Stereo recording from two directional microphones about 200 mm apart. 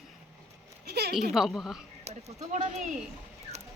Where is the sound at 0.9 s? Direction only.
50° right (ahead or behind).